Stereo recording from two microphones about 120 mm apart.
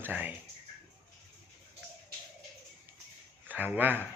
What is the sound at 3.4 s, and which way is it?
Speech, 15° right (ahead or behind).